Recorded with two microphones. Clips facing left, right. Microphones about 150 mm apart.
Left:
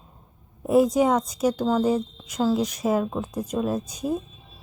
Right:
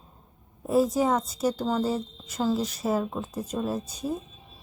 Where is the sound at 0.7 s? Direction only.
15° left (ahead or behind).